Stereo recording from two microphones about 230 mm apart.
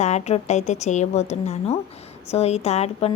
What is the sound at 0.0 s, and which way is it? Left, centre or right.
A woman's voice, left.